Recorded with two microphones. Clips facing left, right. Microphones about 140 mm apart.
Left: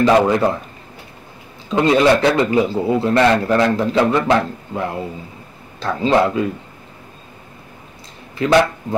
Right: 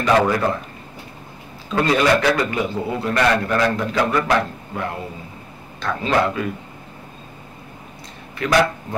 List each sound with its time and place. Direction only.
0.0 s a man's voice: 20° left (ahead or behind)
1.7 s a man's voice: 25° left (ahead or behind)
8.4 s a man's voice: 25° left (ahead or behind)